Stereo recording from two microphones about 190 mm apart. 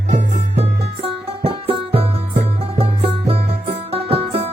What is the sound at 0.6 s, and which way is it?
Music, 30° right (ahead or behind).